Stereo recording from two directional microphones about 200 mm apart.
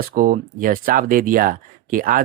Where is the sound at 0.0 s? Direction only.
45° right (ahead or behind).